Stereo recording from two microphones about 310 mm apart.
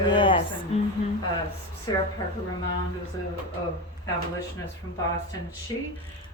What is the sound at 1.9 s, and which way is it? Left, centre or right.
Speech, centre.